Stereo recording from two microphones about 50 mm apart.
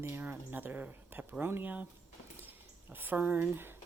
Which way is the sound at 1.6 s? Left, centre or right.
Right.